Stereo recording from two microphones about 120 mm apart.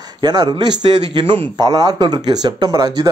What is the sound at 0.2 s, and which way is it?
A man's voice, 35° right (ahead or behind).